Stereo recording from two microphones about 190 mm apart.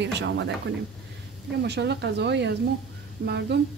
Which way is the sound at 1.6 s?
60° right (ahead or behind).